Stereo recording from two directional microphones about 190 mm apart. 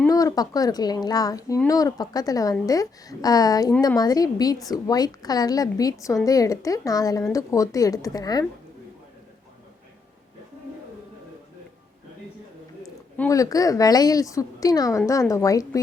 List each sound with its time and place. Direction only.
0.1 s a woman's voice: 20° left (ahead or behind)
13.2 s a woman's voice: 20° left (ahead or behind)